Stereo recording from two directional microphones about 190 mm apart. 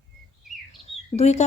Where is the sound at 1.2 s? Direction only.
35° left (ahead or behind).